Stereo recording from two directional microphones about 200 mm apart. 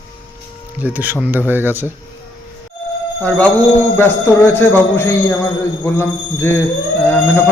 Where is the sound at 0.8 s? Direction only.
10° right (ahead or behind).